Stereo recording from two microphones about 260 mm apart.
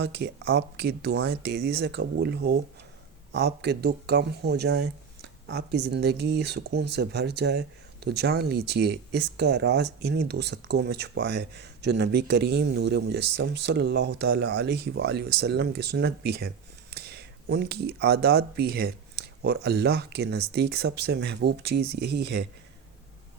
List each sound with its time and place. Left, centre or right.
0.0 s speech: right